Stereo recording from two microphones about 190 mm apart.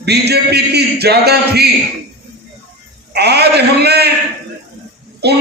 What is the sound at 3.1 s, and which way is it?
A man's voice, 60° right (ahead or behind).